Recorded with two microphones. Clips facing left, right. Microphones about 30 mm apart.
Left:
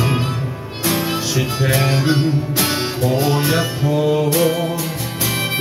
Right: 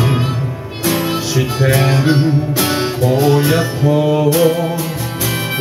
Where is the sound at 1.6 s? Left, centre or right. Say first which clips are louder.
Right 4 dB; centre.